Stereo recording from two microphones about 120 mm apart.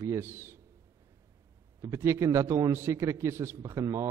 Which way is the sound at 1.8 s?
25° right (ahead or behind).